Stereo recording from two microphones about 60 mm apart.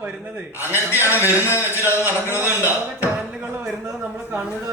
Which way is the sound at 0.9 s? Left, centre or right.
Left.